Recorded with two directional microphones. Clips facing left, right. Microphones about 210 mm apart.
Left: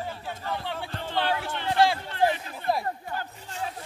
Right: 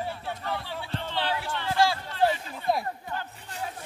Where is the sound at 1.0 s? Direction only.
50° left (ahead or behind).